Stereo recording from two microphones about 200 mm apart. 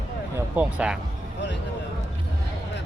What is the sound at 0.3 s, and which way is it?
Speech, 5° right (ahead or behind).